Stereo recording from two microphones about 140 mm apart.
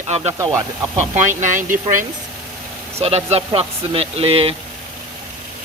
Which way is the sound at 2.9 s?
45° right (ahead or behind).